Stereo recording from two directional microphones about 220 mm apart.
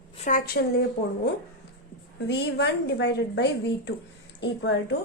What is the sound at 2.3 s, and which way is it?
Speech, 50° left (ahead or behind).